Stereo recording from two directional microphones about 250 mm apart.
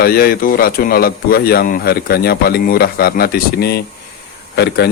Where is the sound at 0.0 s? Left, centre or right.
Left.